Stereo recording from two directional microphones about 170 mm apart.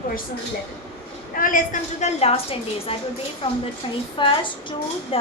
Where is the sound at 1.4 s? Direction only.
50° left (ahead or behind).